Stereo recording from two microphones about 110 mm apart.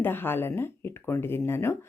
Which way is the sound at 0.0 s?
20° left (ahead or behind).